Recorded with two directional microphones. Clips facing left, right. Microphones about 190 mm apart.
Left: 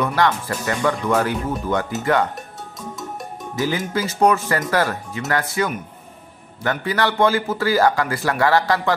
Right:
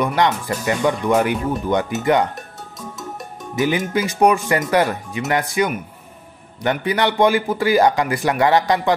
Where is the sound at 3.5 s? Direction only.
20° right (ahead or behind).